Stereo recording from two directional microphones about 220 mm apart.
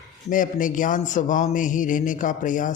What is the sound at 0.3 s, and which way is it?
A man's voice, 35° left (ahead or behind).